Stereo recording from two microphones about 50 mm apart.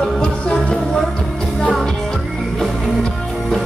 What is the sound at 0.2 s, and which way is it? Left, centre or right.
Music, centre.